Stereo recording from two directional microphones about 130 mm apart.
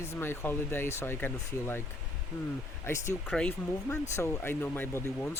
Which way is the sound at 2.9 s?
20° left (ahead or behind).